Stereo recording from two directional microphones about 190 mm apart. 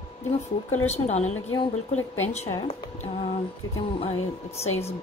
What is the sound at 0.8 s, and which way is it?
Speech, 35° left (ahead or behind).